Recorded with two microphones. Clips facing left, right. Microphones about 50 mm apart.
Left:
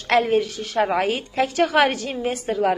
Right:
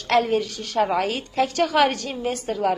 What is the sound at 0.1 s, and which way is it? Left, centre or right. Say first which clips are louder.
A woman's voice: left 2 dB; centre.